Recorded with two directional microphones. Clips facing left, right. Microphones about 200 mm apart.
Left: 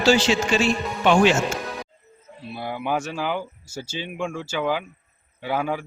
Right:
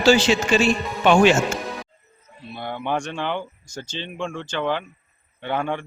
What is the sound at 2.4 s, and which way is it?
A man's voice, 5° left (ahead or behind).